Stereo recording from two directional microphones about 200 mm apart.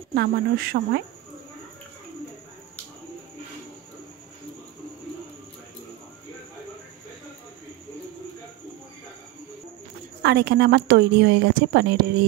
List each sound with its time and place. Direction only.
0.1 s speech: 50° right (ahead or behind)
10.2 s a woman's voice: 55° right (ahead or behind)